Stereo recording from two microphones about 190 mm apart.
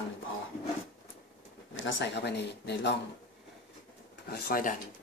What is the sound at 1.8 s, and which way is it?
Speech, 70° left (ahead or behind).